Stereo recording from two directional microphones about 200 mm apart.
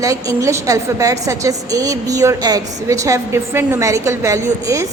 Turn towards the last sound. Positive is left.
turn(degrees=-15)  # may be behind; listen again after turning